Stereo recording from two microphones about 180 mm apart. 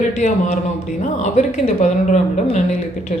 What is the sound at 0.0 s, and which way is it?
Speech, 40° left (ahead or behind).